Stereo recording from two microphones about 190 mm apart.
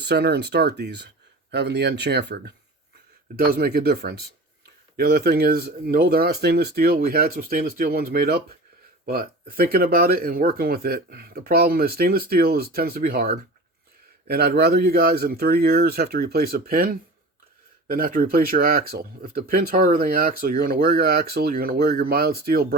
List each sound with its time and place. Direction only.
0.0 s speech: 60° right (ahead or behind)